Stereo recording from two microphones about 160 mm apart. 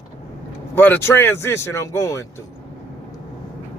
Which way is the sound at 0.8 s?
10° left (ahead or behind).